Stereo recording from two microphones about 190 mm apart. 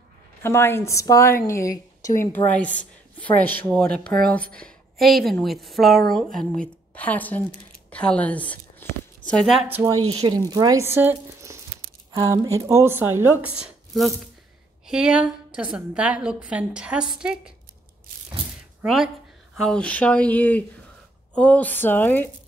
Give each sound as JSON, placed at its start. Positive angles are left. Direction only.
{"t": 0.4, "sound": "a woman's voice", "side_deg": 10}
{"t": 10.0, "sound": "speech", "side_deg": -35}
{"t": 10.5, "sound": "a woman's voice", "side_deg": -20}
{"t": 18.8, "sound": "a woman's voice", "side_deg": 0}